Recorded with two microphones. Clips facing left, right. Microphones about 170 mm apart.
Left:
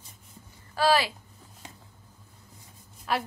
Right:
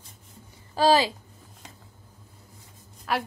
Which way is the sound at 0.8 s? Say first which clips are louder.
Right 3 dB; 20° right (ahead or behind).